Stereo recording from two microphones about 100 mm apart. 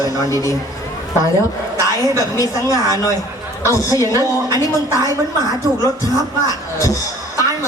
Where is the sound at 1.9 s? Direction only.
35° left (ahead or behind).